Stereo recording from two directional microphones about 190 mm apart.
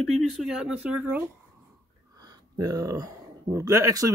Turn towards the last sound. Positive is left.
turn(degrees=-15)  # may be behind; listen again after turning